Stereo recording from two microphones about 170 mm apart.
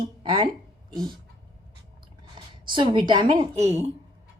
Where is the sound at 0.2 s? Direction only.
30° right (ahead or behind).